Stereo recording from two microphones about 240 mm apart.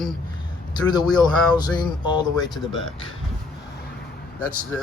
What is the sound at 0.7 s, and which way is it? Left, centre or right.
Speech, centre.